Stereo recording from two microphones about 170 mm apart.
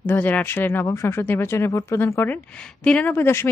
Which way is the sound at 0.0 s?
10° left (ahead or behind).